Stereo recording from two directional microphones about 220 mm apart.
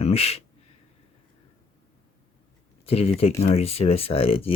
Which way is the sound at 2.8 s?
25° left (ahead or behind).